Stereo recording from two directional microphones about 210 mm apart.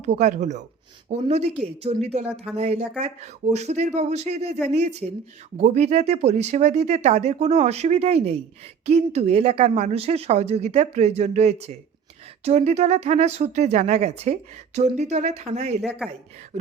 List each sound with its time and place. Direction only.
0.0 s speech: 35° right (ahead or behind)